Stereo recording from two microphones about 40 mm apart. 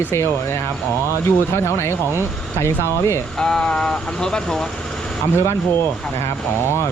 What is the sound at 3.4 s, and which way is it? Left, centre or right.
Speech, centre.